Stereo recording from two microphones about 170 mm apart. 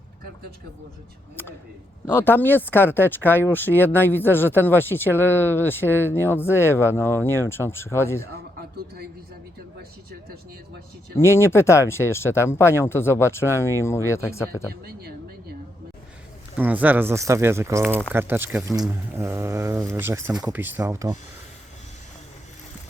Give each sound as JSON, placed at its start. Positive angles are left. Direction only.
{"t": 2.0, "sound": "speech", "side_deg": 10}
{"t": 11.1, "sound": "speech", "side_deg": 15}
{"t": 14.7, "sound": "a sound", "side_deg": -65}
{"t": 16.6, "sound": "speech", "side_deg": -10}